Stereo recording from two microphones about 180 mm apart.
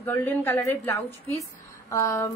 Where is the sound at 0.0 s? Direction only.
10° left (ahead or behind).